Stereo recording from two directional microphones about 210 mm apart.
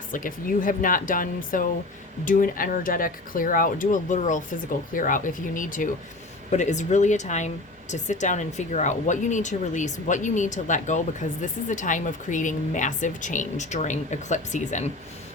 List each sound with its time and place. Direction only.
0.1 s speech: 40° left (ahead or behind)